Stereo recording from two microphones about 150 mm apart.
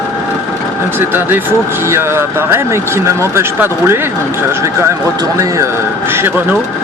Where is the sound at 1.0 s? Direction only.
15° right (ahead or behind).